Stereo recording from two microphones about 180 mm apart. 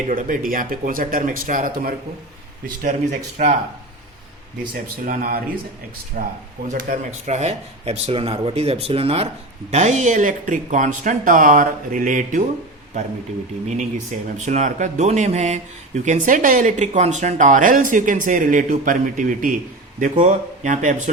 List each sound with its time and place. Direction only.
0.1 s speech: 50° right (ahead or behind)
4.7 s speech: 50° right (ahead or behind)
13.7 s speech: 40° right (ahead or behind)